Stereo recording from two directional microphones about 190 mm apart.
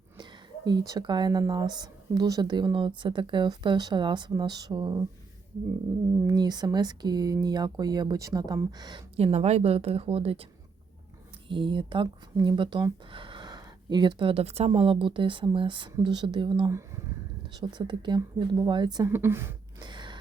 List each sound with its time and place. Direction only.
0.2 s speech: 20° right (ahead or behind)
6.2 s speech: 20° right (ahead or behind)
11.4 s speech: 25° right (ahead or behind)
16.6 s a woman's voice: 15° right (ahead or behind)